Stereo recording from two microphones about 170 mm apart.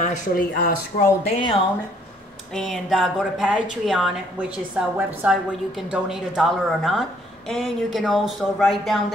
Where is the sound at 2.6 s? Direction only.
Centre (ahead or behind).